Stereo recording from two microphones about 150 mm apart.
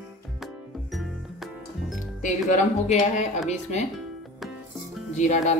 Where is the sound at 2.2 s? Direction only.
60° left (ahead or behind).